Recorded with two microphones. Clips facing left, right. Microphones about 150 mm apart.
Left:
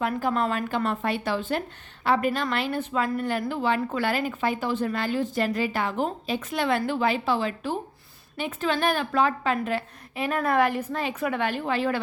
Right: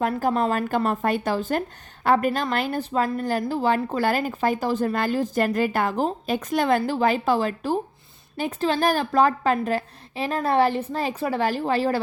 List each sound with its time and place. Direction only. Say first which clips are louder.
0.0 s a woman's voice: right 3 dB; 40° right (ahead or behind)